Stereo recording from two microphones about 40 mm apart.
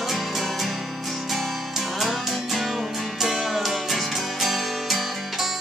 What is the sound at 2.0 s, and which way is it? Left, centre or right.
Music, centre.